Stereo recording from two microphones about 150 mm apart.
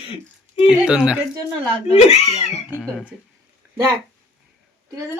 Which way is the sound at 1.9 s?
45° left (ahead or behind).